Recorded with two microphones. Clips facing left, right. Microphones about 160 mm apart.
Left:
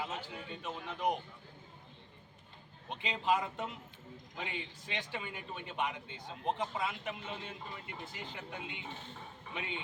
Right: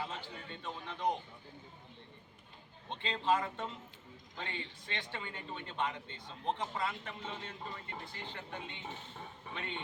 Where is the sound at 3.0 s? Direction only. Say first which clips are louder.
Even; 15° left (ahead or behind).